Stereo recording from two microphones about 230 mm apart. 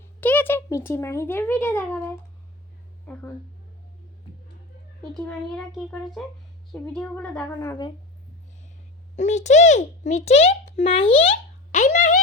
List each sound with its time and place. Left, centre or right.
0.0 s a child's voice: centre
5.1 s a child's voice: centre
9.1 s a child's voice: left